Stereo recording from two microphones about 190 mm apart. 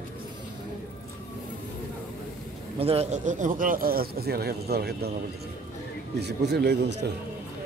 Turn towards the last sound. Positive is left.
turn(degrees=-60)  # may be behind; listen again after turning